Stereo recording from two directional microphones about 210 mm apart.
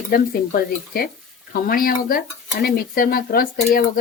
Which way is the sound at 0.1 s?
45° left (ahead or behind).